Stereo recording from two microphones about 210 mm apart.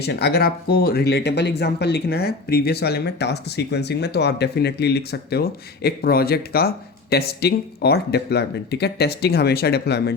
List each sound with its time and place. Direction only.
0.0 s speech: 50° left (ahead or behind)